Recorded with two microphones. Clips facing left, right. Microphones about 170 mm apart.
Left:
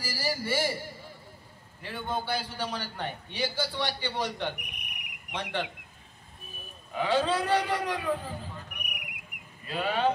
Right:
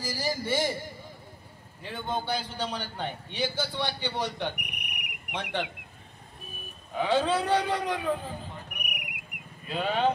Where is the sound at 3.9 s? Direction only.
15° right (ahead or behind).